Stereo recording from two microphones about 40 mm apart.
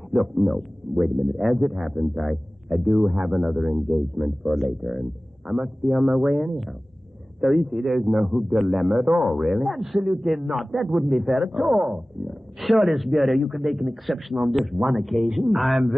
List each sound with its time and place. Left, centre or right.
0.1 s a man's voice: centre
8.9 s speech: centre
9.3 s a man's voice: centre